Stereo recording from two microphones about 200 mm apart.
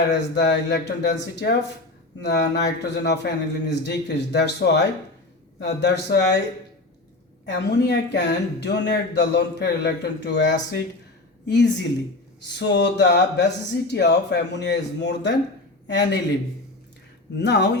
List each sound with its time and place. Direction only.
0.1 s speech: 60° left (ahead or behind)
2.2 s speech: 55° left (ahead or behind)
7.4 s speech: 60° left (ahead or behind)
17.3 s speech: 60° left (ahead or behind)